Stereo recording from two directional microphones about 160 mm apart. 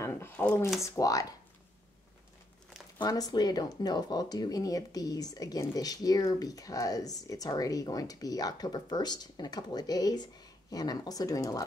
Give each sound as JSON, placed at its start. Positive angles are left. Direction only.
{"t": 0.0, "sound": "a sound", "side_deg": 15}
{"t": 0.8, "sound": "speech", "side_deg": 20}
{"t": 3.0, "sound": "speech", "side_deg": 25}